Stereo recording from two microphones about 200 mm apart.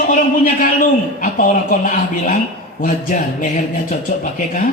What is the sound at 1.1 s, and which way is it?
A woman's voice, 45° left (ahead or behind).